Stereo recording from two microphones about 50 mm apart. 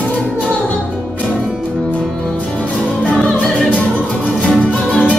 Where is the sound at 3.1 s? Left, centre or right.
Left.